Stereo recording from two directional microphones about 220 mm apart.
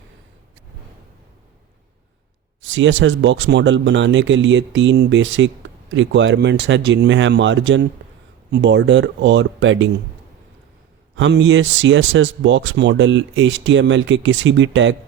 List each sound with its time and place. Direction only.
2.6 s speech: 55° right (ahead or behind)
11.1 s speech: 60° right (ahead or behind)